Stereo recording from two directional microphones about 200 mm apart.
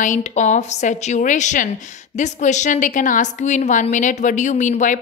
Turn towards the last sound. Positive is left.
turn(degrees=40)  # may be behind; listen again after turning